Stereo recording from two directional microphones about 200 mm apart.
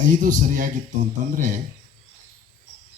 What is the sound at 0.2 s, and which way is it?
A man's voice, 40° right (ahead or behind).